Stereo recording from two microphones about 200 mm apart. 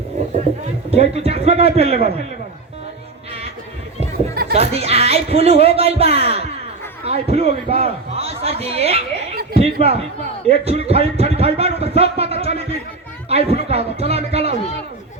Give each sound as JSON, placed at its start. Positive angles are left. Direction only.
{"t": 0.9, "sound": "speech", "side_deg": -30}
{"t": 4.5, "sound": "speech", "side_deg": -30}